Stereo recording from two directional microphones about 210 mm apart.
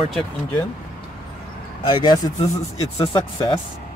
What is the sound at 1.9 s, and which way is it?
Speech, 20° left (ahead or behind).